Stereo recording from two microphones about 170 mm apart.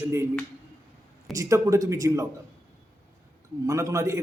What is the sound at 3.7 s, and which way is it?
Speech, 15° right (ahead or behind).